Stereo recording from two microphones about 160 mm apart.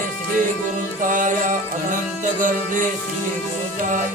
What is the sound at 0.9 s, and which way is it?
Music, 55° right (ahead or behind).